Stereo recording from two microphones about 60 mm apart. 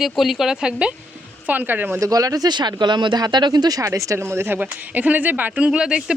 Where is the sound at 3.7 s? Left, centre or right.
Right.